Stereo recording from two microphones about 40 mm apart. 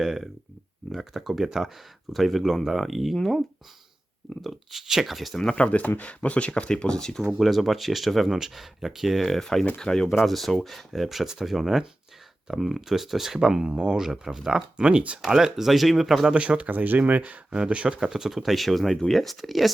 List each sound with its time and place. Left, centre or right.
0.0 s speech: centre
4.4 s speech: centre
5.5 s speech: left; by 7.3 s centre
7.3 s speech: centre
9.2 s speech: centre
10.2 s speech: centre; by 15.2 s right
15.3 s speech: centre
16.3 s speech: right
16.6 s speech: right
17.5 s speech: right
18.0 s speech: centre